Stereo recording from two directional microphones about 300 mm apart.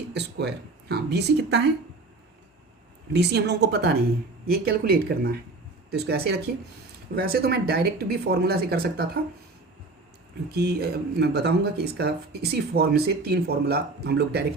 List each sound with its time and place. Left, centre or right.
0.1 s speech: right
3.2 s speech: right
10.5 s speech: right